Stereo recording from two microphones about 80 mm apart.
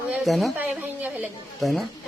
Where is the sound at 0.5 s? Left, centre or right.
Centre.